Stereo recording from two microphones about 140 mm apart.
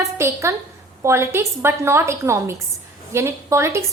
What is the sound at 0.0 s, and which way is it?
A woman's voice, 20° right (ahead or behind).